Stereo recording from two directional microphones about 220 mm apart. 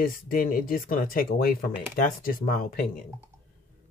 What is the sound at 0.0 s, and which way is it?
Speech, 40° left (ahead or behind).